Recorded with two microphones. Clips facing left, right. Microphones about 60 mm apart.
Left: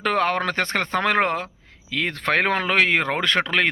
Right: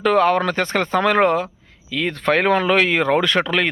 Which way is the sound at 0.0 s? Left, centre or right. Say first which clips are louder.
Right 5 dB; left.